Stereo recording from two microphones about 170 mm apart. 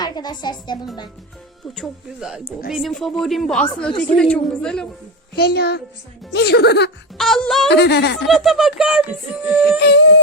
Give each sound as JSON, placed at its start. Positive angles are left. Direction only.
{"t": 0.0, "sound": "speech", "side_deg": 25}
{"t": 1.6, "sound": "speech", "side_deg": 0}
{"t": 5.3, "sound": "speech", "side_deg": 70}
{"t": 7.2, "sound": "speech", "side_deg": 0}
{"t": 7.7, "sound": "speech", "side_deg": 90}
{"t": 8.3, "sound": "speech", "side_deg": 0}
{"t": 9.5, "sound": "music", "side_deg": -5}
{"t": 9.8, "sound": "music", "side_deg": 90}